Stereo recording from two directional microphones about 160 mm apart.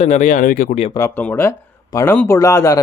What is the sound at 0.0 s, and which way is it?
Speech, 50° left (ahead or behind).